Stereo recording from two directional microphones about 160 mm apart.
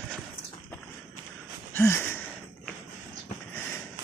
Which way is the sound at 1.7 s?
15° left (ahead or behind).